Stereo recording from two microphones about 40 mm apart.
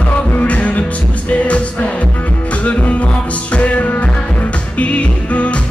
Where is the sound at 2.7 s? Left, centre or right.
Left.